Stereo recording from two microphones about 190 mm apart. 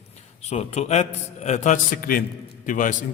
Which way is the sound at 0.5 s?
35° left (ahead or behind).